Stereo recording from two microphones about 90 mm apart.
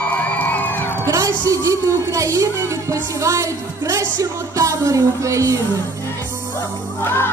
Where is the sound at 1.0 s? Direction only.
40° right (ahead or behind).